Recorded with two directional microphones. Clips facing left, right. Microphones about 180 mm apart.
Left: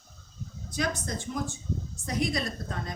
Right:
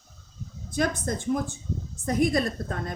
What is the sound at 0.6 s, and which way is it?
A woman's voice, 55° right (ahead or behind).